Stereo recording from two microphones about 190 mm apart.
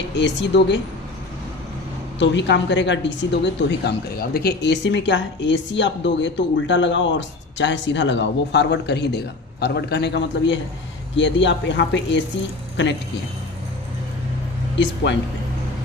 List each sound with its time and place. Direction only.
0.2 s speech: 70° left (ahead or behind)
2.1 s speech: 70° left (ahead or behind)